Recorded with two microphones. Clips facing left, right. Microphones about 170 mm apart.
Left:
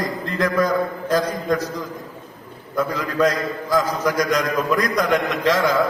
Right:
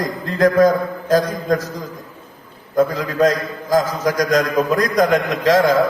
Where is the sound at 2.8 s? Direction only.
40° right (ahead or behind).